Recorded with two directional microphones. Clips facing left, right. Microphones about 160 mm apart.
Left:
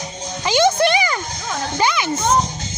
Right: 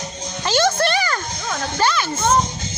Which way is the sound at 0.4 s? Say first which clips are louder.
Left 3 dB; 15° left (ahead or behind).